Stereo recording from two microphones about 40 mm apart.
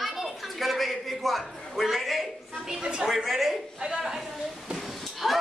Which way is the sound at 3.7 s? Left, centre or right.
Centre.